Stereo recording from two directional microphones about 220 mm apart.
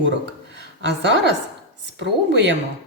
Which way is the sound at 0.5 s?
55° right (ahead or behind).